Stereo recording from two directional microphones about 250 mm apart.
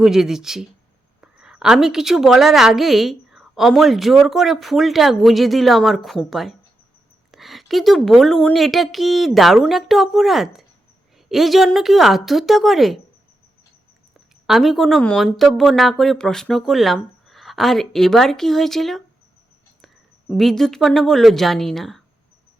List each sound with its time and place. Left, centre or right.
0.0 s a woman's voice: centre
14.4 s a woman's voice: centre